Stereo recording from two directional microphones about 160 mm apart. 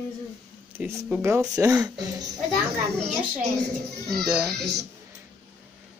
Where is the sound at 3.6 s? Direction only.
Centre (ahead or behind).